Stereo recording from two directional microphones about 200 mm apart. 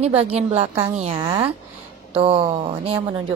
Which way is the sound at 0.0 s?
30° right (ahead or behind).